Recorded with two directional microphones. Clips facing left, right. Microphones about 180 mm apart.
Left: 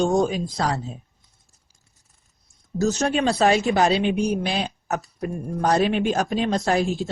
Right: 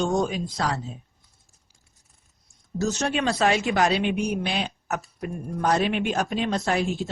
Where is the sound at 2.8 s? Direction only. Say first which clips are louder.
Left 4 dB; 40° left (ahead or behind).